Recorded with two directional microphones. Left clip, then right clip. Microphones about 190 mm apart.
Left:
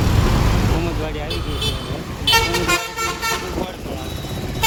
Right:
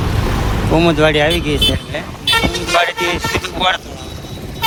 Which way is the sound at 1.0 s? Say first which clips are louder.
Right 15 dB; 55° right (ahead or behind).